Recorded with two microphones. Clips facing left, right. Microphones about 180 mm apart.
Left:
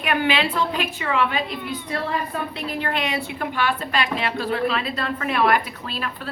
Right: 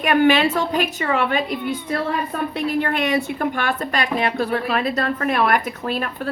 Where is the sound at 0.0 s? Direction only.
45° right (ahead or behind).